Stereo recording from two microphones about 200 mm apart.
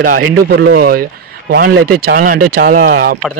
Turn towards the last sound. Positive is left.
turn(degrees=-45)  # may be behind; listen again after turning